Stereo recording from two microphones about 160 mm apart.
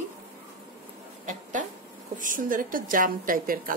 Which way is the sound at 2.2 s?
55° right (ahead or behind).